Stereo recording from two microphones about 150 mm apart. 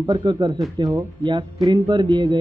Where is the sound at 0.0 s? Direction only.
30° right (ahead or behind).